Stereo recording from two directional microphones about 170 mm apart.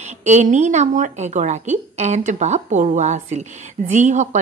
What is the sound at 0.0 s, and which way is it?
A woman's voice, 45° right (ahead or behind).